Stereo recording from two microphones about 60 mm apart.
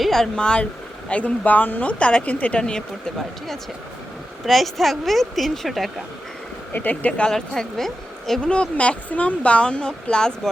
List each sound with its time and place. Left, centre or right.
0.0 s speech: centre
0.3 s speech: centre
3.2 s speech: centre
6.7 s speech: left
7.3 s speech: centre
8.4 s speech: centre